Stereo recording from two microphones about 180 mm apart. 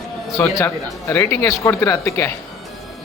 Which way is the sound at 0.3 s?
15° left (ahead or behind).